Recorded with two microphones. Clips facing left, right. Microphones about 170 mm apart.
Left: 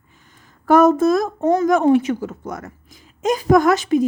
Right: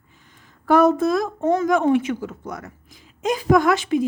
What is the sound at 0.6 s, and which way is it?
Speech, 45° left (ahead or behind).